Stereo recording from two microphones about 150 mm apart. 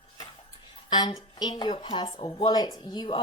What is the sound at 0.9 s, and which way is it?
Speech, 30° left (ahead or behind).